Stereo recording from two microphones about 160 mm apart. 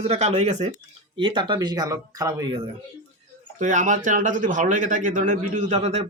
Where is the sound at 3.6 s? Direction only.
50° right (ahead or behind).